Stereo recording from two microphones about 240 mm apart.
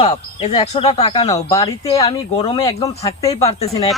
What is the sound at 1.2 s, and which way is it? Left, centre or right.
Speech, centre.